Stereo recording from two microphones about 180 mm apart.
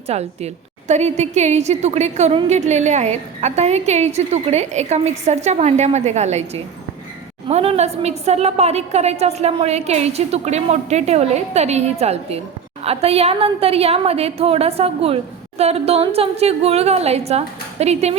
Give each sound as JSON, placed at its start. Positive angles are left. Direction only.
{"t": 0.1, "sound": "a woman's voice", "side_deg": -35}